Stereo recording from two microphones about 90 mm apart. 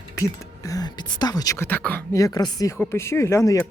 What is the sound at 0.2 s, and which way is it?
Speech, 40° left (ahead or behind).